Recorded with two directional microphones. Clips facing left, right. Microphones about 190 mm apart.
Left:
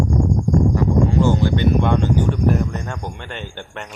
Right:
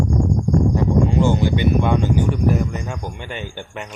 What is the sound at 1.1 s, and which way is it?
Speech, 15° right (ahead or behind).